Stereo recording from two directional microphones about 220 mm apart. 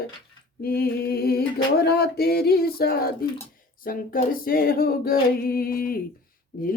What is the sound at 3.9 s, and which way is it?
Female singing, 40° left (ahead or behind).